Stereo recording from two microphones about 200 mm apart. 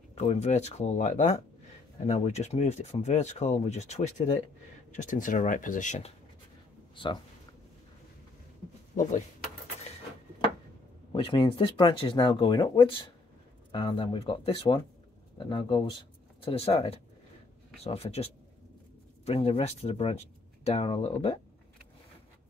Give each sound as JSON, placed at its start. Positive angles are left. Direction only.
{"t": 0.1, "sound": "speech", "side_deg": 35}
{"t": 7.0, "sound": "speech", "side_deg": 25}
{"t": 11.1, "sound": "speech", "side_deg": 25}